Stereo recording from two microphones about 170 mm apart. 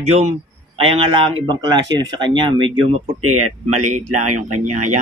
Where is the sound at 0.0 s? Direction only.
40° right (ahead or behind).